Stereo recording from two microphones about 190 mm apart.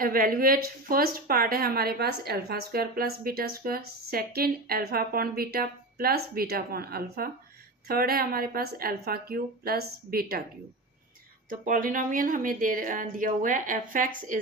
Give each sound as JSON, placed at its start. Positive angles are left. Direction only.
{"t": 0.0, "sound": "speech", "side_deg": -50}
{"t": 11.4, "sound": "speech", "side_deg": -45}